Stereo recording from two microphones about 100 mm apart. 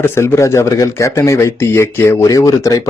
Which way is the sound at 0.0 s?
30° left (ahead or behind).